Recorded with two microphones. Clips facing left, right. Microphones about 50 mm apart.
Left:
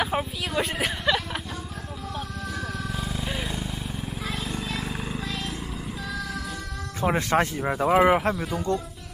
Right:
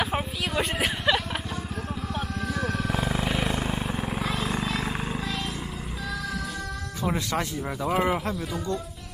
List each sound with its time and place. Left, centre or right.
0.0 s a sound: centre
2.1 s music: centre
2.9 s vehicle: right
3.7 s vehicle: right
4.2 s horse: centre
5.2 s a sound: centre
7.0 s speech: left
8.4 s speech: centre